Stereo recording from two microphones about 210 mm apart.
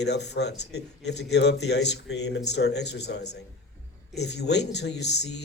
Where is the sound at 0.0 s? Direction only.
55° left (ahead or behind).